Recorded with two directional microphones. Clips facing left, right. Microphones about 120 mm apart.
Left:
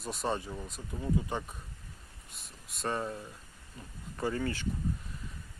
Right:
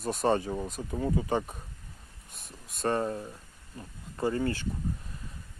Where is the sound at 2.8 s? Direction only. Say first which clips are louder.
Right 6 dB; 45° right (ahead or behind).